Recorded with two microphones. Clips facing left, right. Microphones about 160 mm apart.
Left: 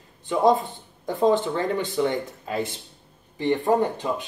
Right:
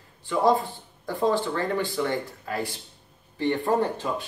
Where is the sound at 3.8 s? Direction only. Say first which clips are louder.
Left 2 dB; 15° left (ahead or behind).